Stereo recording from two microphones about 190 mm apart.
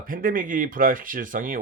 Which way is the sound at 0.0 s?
45° right (ahead or behind).